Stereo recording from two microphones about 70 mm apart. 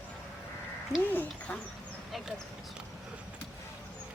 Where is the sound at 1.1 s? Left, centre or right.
Left.